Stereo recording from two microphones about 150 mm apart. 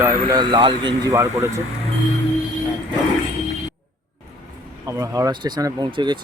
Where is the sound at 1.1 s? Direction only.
20° right (ahead or behind).